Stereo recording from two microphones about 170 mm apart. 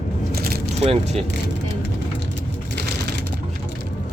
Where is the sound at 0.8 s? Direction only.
40° right (ahead or behind).